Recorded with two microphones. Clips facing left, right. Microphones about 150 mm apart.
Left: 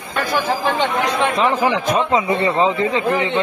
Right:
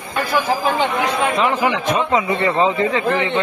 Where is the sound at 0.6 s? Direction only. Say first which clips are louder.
Even; 5° right (ahead or behind).